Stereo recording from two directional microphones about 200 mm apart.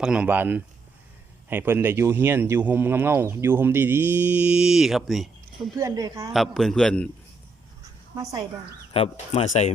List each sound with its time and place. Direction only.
0.0 s speech: 5° right (ahead or behind)
5.7 s speech: 15° right (ahead or behind)
6.3 s a man's voice: centre (ahead or behind)
8.1 s speech: 15° right (ahead or behind)
8.9 s speech: 30° left (ahead or behind)